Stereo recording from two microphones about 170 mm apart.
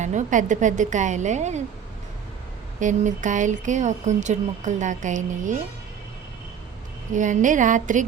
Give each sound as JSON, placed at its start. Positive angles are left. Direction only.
{"t": 0.0, "sound": "speech", "side_deg": -45}
{"t": 2.8, "sound": "speech", "side_deg": -50}
{"t": 7.1, "sound": "speech", "side_deg": -45}